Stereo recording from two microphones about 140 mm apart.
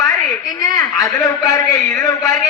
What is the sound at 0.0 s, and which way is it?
A man's voice, 25° left (ahead or behind).